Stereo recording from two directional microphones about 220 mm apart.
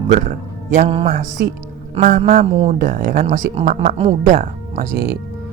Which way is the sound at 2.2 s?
30° right (ahead or behind).